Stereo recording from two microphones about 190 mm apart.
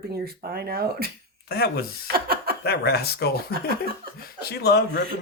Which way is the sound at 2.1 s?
55° right (ahead or behind).